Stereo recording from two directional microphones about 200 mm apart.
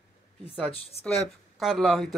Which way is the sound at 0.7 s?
30° left (ahead or behind).